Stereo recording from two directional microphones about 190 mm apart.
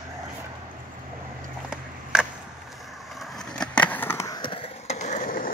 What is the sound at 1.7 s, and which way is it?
Vehicle, centre (ahead or behind).